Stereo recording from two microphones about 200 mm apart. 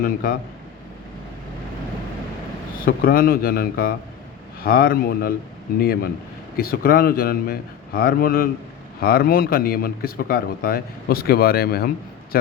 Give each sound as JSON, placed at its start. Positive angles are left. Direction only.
{"t": 0.0, "sound": "speech", "side_deg": 45}
{"t": 2.8, "sound": "speech", "side_deg": 45}